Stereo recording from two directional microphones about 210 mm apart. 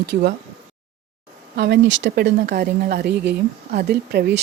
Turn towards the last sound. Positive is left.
turn(degrees=-50)  # may be behind; listen again after turning